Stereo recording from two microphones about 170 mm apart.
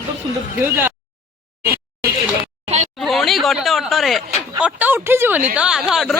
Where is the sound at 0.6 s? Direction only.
10° right (ahead or behind).